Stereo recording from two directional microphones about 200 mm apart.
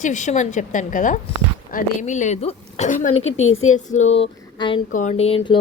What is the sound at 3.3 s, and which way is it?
Speech, 90° left.